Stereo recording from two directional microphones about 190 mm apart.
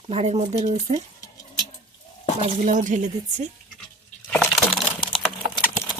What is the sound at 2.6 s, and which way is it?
Speech, 40° right (ahead or behind).